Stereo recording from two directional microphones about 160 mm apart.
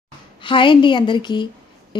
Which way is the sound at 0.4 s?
30° left (ahead or behind).